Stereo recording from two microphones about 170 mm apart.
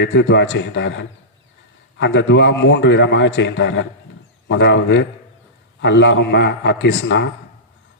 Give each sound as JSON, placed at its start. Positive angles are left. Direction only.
{"t": 0.0, "sound": "a man's voice", "side_deg": 90}